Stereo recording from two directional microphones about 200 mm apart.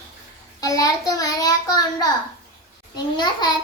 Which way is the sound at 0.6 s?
15° left (ahead or behind).